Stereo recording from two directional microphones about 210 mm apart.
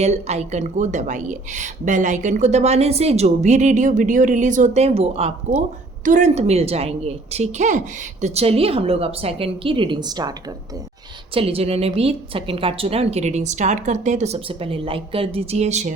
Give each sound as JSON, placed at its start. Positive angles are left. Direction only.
{"t": 0.0, "sound": "a woman's voice", "side_deg": -30}
{"t": 11.3, "sound": "a woman's voice", "side_deg": -25}